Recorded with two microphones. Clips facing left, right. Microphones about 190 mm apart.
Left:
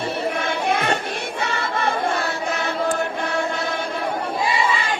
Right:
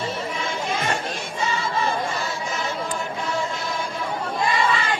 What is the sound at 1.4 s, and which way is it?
Choir, 65° left (ahead or behind).